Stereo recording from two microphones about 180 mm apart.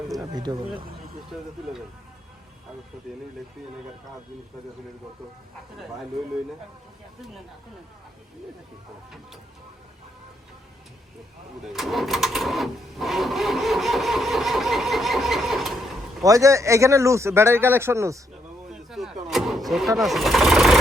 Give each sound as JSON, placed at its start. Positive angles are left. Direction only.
{"t": 0.3, "sound": "speech", "side_deg": -25}
{"t": 1.3, "sound": "speech", "side_deg": -5}
{"t": 11.7, "sound": "speech", "side_deg": 0}
{"t": 16.2, "sound": "speech", "side_deg": -20}
{"t": 18.7, "sound": "vehicle", "side_deg": 0}
{"t": 20.0, "sound": "speech", "side_deg": 0}